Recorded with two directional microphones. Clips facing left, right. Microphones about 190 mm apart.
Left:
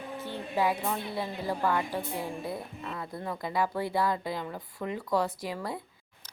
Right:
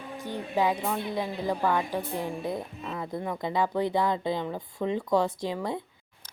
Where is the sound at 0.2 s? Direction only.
15° right (ahead or behind).